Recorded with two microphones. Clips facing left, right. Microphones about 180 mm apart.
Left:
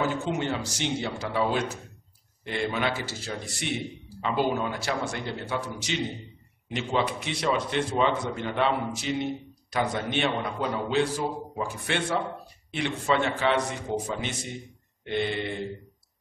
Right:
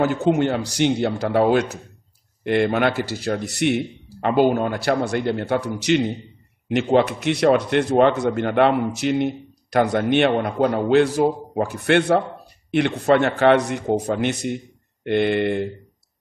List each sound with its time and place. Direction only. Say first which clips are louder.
0.0 s a man's voice: right 9 dB; 65° right (ahead or behind)